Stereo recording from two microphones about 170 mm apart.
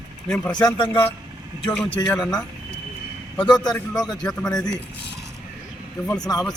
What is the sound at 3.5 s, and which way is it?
Speech, 25° left (ahead or behind).